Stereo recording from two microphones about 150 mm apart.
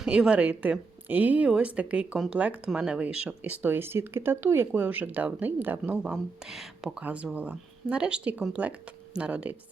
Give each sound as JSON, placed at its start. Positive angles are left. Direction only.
{"t": 0.0, "sound": "speech", "side_deg": -5}